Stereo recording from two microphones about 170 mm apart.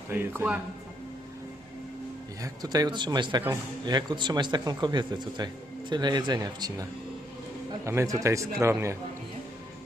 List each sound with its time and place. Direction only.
0.1 s a man's voice: 15° right (ahead or behind)
2.4 s speech: 20° right (ahead or behind)
7.9 s a man's voice: 15° right (ahead or behind)